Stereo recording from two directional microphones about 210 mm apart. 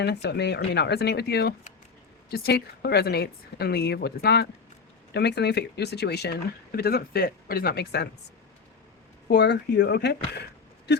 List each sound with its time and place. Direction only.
0.0 s speech: 50° left (ahead or behind)
9.3 s speech: 55° left (ahead or behind)